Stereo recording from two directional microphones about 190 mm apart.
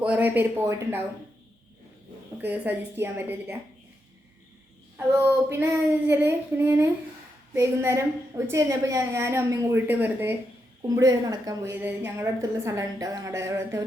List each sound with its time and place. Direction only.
0.0 s a woman's voice: 10° right (ahead or behind)
2.4 s a woman's voice: 10° right (ahead or behind)
4.9 s a woman's voice: 10° right (ahead or behind)